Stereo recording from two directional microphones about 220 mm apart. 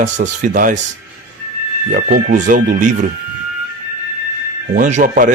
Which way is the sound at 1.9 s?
40° right (ahead or behind).